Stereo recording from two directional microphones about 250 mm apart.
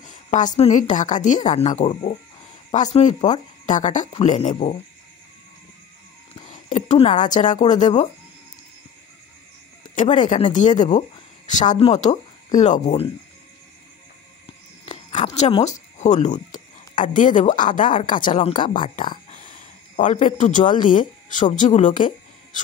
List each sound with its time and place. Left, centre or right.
0.0 s a woman's voice: left
6.4 s speech: left
9.8 s a woman's voice: left
14.9 s a sound: left
16.0 s a woman's voice: left
20.0 s a woman's voice: left